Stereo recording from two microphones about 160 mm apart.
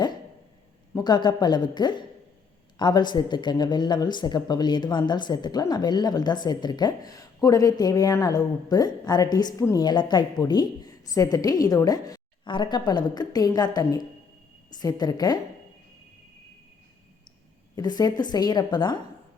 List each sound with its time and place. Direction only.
0.9 s speech: 25° left (ahead or behind)
17.7 s speech: 25° left (ahead or behind)